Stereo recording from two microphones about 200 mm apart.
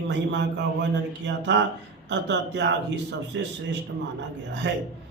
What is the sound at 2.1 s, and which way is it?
A man's voice, 60° right (ahead or behind).